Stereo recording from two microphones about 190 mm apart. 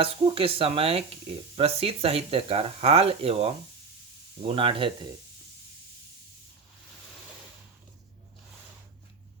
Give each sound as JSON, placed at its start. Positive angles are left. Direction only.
{"t": 0.0, "sound": "speech", "side_deg": -30}